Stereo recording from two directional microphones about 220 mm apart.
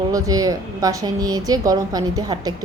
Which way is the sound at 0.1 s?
15° right (ahead or behind).